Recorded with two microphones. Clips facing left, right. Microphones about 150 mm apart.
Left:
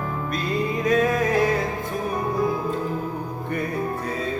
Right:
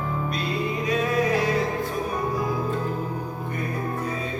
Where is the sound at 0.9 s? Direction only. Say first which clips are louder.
Left 4 dB; 45° left (ahead or behind).